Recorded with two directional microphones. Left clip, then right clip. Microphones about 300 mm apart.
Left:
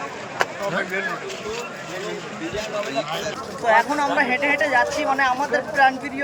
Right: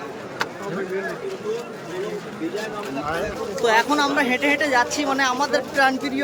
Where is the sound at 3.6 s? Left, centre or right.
Centre.